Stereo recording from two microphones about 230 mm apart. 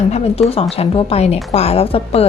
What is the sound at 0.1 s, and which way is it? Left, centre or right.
A woman's voice, left.